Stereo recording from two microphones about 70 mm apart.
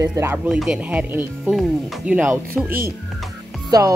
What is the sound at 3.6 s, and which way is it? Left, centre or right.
Speech, right.